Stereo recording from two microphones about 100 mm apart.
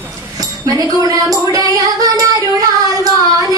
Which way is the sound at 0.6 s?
35° right (ahead or behind).